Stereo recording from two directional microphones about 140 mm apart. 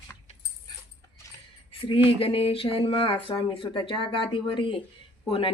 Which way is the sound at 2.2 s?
40° left (ahead or behind).